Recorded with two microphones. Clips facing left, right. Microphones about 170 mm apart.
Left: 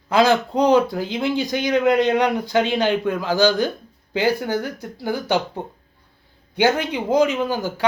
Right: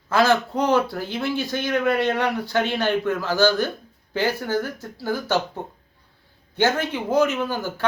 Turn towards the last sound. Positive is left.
turn(degrees=15)  # may be behind; listen again after turning